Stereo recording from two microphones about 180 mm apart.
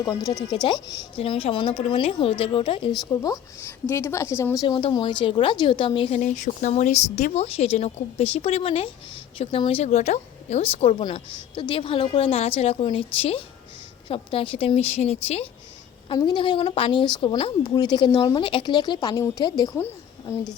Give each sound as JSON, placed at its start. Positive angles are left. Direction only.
{"t": 0.5, "sound": "a woman's voice", "side_deg": 25}
{"t": 3.1, "sound": "a woman's voice", "side_deg": 20}